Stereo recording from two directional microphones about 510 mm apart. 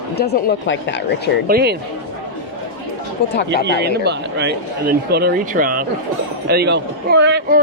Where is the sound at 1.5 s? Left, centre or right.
Centre.